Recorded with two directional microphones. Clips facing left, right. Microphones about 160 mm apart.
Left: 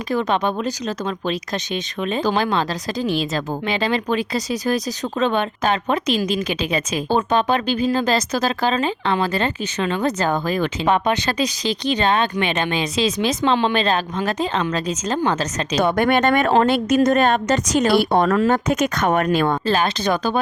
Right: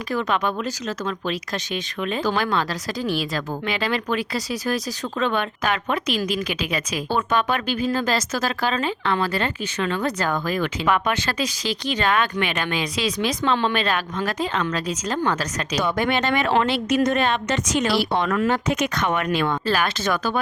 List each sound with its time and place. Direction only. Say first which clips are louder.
0.1 s speech: left 3 dB; 20° left (ahead or behind)
15.8 s a woman's voice: left 6 dB; 55° left (ahead or behind)
19.6 s speech: left 3 dB; 25° left (ahead or behind)